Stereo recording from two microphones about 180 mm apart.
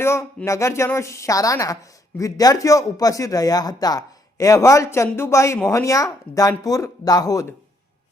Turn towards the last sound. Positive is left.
turn(degrees=20)  # may be behind; listen again after turning